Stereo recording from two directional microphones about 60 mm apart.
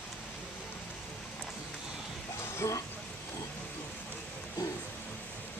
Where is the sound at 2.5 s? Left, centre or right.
Left.